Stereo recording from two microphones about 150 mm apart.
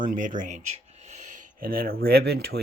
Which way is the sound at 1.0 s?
50° right (ahead or behind).